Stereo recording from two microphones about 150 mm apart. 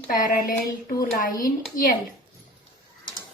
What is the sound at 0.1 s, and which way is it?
A woman's voice, 70° left (ahead or behind).